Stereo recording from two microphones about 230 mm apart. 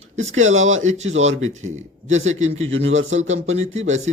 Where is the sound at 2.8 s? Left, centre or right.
Right.